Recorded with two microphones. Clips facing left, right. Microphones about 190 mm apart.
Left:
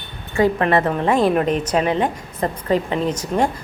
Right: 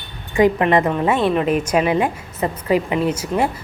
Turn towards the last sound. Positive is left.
turn(degrees=-5)  # may be behind; listen again after turning